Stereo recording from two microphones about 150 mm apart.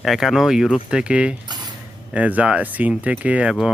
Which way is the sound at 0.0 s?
Centre (ahead or behind).